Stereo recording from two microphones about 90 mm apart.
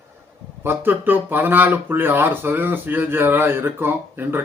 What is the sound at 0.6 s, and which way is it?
Speech, 25° right (ahead or behind).